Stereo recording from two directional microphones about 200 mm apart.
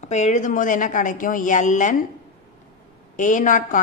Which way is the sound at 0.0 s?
35° left (ahead or behind).